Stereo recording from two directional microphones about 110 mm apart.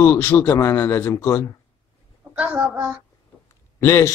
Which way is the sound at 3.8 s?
25° left (ahead or behind).